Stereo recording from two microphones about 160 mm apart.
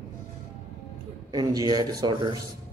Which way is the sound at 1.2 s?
25° right (ahead or behind).